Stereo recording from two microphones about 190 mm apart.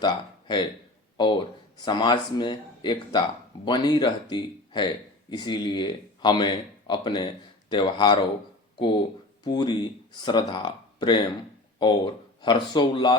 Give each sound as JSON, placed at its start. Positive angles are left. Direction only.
{"t": 0.0, "sound": "speech", "side_deg": 25}
{"t": 9.4, "sound": "speech", "side_deg": 25}